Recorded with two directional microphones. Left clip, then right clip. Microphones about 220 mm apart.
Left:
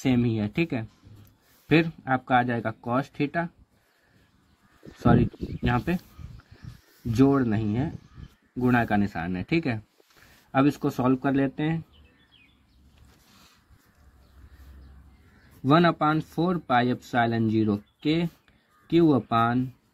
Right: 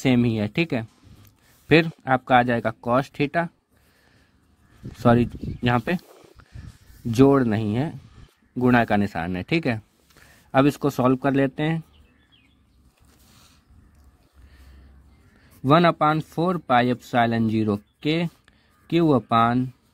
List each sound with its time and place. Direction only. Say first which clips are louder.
0.0 s speech: right 4 dB; 40° right (ahead or behind)
4.9 s speech: right 4 dB; 45° right (ahead or behind)
7.1 s speech: right 5 dB; 45° right (ahead or behind)
15.6 s speech: right 4 dB; 40° right (ahead or behind)